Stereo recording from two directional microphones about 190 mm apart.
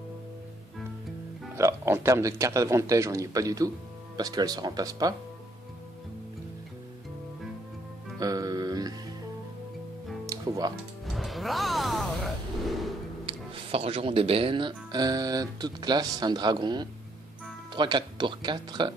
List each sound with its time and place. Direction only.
1.6 s speech: 15° right (ahead or behind)
8.2 s music: 20° right (ahead or behind)
10.2 s music: 20° right (ahead or behind)
11.1 s music: centre (ahead or behind)
12.6 s a sound: centre (ahead or behind)
13.2 s speech: 30° right (ahead or behind)